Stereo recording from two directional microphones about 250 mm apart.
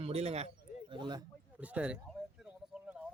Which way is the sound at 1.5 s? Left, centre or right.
Centre.